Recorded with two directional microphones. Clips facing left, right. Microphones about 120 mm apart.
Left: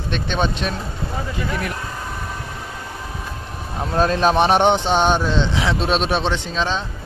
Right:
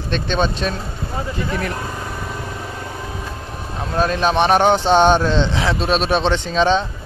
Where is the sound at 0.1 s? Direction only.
15° left (ahead or behind).